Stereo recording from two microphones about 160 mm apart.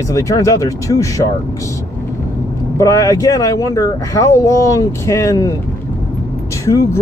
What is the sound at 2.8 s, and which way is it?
Speech, 20° left (ahead or behind).